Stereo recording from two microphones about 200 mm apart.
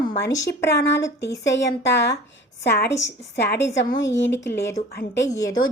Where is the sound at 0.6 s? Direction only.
60° left (ahead or behind).